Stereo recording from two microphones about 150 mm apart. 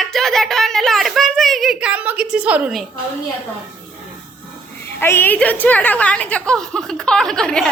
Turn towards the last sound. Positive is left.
turn(degrees=5)  # may be behind; listen again after turning